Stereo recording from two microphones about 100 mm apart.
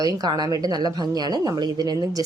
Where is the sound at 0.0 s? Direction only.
45° right (ahead or behind).